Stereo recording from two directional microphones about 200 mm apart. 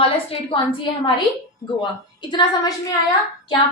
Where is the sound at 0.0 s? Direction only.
30° left (ahead or behind).